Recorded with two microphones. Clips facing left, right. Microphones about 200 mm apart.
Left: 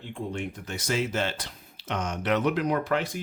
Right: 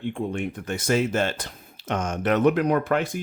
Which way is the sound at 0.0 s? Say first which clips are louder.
Right 6 dB; 55° right (ahead or behind).